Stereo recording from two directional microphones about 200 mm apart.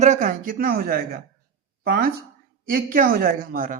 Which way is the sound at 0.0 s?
40° right (ahead or behind).